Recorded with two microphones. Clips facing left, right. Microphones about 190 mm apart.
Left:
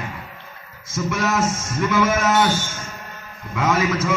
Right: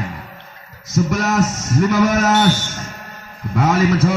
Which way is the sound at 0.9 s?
40° right (ahead or behind).